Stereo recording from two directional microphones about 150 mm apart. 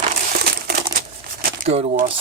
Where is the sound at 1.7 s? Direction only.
45° right (ahead or behind).